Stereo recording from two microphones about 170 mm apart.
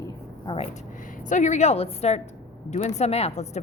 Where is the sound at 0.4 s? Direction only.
35° left (ahead or behind).